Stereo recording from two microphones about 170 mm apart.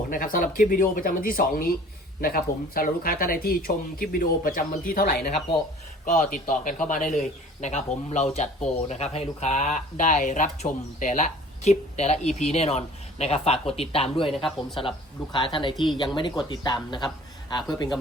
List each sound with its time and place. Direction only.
0.1 s speech: 55° left (ahead or behind)
6.1 s a man's voice: 50° left (ahead or behind)
14.3 s speech: centre (ahead or behind)
14.8 s speech: 30° left (ahead or behind)